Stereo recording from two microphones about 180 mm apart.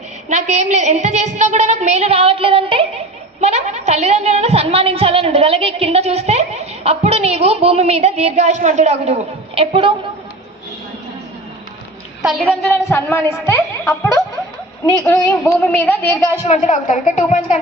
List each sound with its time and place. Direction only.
0.3 s a woman's voice: 40° right (ahead or behind)
12.2 s a woman's voice: centre (ahead or behind)
16.5 s a woman's voice: 40° left (ahead or behind)